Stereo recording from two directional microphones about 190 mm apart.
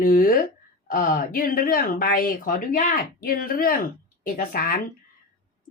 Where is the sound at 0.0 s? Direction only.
50° left (ahead or behind).